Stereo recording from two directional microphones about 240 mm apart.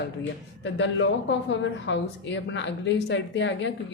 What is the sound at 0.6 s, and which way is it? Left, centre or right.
A woman's voice, left.